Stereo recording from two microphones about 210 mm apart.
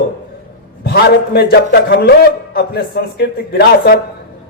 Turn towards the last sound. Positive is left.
turn(degrees=50)  # may be behind; listen again after turning